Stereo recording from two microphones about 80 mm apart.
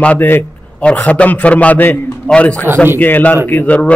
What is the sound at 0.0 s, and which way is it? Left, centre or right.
A man's voice, centre.